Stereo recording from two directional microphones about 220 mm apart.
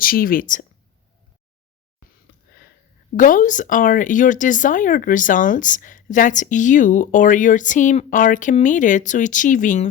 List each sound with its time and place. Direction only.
0.0 s speech: 40° left (ahead or behind)
3.2 s speech: 35° left (ahead or behind)